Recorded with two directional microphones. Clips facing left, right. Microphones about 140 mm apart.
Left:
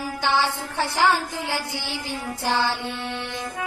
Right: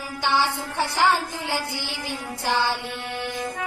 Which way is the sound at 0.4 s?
15° right (ahead or behind).